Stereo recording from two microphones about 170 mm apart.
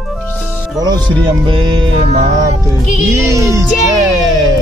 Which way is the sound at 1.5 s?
25° right (ahead or behind).